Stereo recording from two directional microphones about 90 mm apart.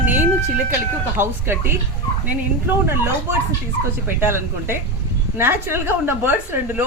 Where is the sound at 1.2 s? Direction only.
25° right (ahead or behind).